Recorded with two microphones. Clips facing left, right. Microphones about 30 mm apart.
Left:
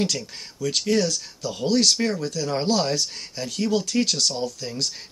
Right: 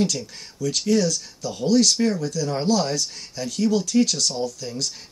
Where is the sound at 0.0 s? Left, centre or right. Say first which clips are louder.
Right 2 dB; left.